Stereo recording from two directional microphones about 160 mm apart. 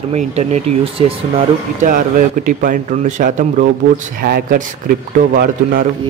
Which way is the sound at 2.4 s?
55° right (ahead or behind).